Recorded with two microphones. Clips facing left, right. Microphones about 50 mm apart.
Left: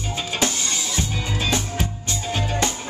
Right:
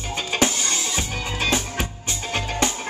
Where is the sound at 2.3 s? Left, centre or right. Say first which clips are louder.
Left 1 dB; right.